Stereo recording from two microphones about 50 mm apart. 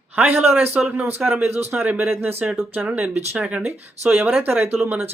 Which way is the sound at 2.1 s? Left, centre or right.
Right.